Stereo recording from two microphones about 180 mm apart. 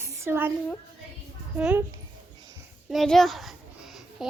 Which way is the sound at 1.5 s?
10° right (ahead or behind).